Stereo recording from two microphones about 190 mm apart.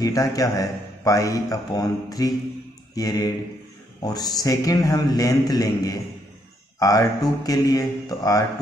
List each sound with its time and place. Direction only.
0.0 s a man's voice: 20° left (ahead or behind)